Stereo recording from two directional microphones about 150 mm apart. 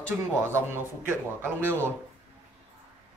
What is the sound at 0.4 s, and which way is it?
Speech, 15° right (ahead or behind).